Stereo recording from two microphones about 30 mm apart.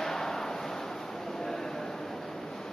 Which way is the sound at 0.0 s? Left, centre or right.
Centre.